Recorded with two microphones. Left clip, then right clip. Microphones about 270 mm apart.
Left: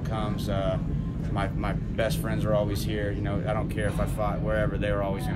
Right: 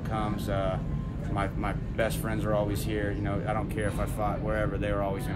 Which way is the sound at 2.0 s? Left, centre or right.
Centre.